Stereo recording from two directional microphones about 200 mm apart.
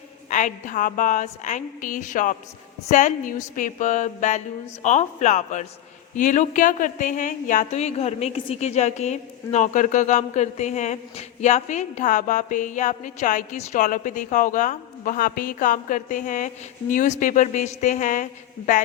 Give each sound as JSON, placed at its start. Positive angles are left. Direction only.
{"t": 0.3, "sound": "speech", "side_deg": 40}